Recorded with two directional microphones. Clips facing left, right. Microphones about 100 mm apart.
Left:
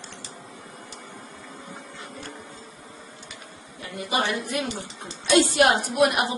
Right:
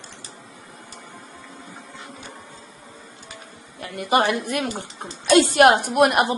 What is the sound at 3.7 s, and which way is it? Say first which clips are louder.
A woman's voice: right 7 dB; 60° right (ahead or behind).